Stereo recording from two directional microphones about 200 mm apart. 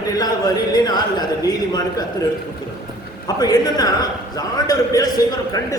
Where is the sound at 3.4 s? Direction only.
20° left (ahead or behind).